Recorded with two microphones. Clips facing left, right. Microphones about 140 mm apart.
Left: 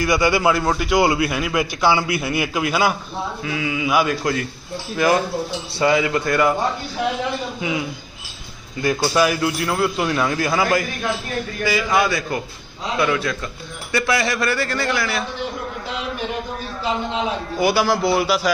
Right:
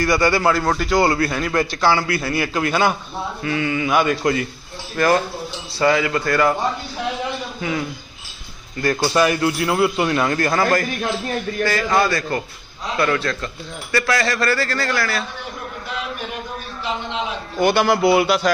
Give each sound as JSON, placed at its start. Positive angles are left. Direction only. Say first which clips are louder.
{"t": 0.0, "sound": "a man's voice", "louder": "even", "side_deg": 15}
{"t": 4.9, "sound": "a man's voice", "louder": "even", "side_deg": 10}
{"t": 7.6, "sound": "a man's voice", "louder": "even", "side_deg": 15}
{"t": 17.6, "sound": "a man's voice", "louder": "right 2 dB", "side_deg": 5}